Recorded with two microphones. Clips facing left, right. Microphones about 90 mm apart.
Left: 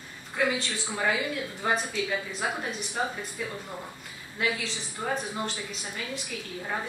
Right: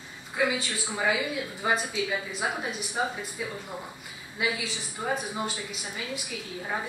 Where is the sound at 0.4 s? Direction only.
5° right (ahead or behind).